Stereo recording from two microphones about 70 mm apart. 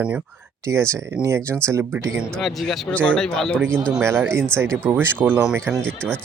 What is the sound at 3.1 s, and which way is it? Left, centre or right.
Speech, centre.